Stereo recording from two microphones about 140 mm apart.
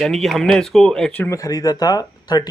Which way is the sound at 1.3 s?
25° left (ahead or behind).